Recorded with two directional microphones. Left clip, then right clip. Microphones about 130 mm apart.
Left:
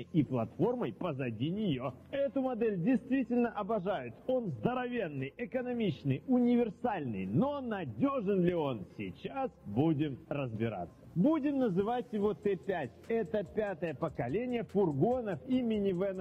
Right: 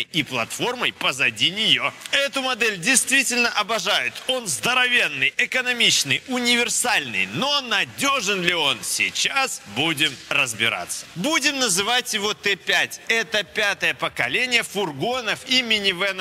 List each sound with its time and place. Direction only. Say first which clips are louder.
0.1 s a man's voice: right 10 dB; 40° left (ahead or behind)